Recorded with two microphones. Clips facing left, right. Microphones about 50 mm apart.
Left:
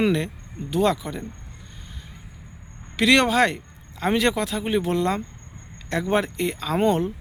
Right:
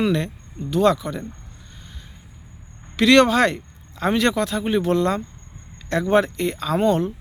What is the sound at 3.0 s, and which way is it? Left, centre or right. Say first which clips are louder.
Speech: right 3 dB; centre.